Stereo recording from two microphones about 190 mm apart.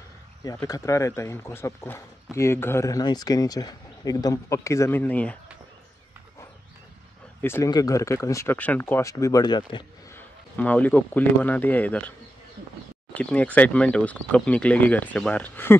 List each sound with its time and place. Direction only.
0.4 s speech: 20° left (ahead or behind)
7.4 s speech: 15° left (ahead or behind)
10.1 s speech: 10° left (ahead or behind)
13.1 s speech: 5° left (ahead or behind)